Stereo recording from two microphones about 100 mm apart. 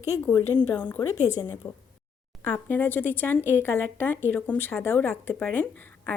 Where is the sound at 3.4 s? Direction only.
20° right (ahead or behind).